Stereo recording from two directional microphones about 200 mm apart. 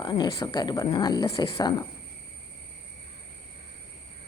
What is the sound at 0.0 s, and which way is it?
Speech, 25° left (ahead or behind).